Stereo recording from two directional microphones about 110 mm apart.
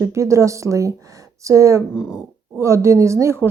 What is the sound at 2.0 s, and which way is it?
Speech, 5° right (ahead or behind).